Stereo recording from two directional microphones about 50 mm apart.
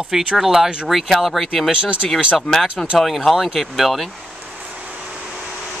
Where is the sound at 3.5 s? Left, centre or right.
Centre.